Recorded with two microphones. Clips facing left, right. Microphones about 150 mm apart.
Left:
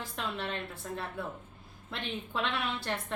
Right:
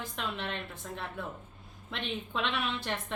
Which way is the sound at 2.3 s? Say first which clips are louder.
Even; 5° left (ahead or behind).